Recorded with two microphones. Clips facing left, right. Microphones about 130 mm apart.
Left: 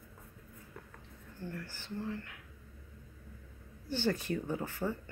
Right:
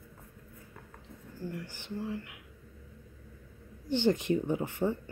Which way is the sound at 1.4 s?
15° right (ahead or behind).